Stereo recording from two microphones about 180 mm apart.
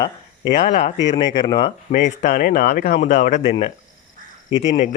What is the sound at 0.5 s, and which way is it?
Speech, 40° left (ahead or behind).